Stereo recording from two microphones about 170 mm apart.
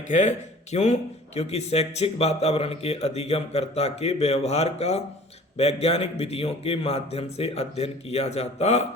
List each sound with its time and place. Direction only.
0.1 s a man's voice: 45° left (ahead or behind)